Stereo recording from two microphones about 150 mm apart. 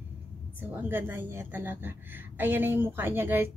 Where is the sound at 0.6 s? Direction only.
10° right (ahead or behind).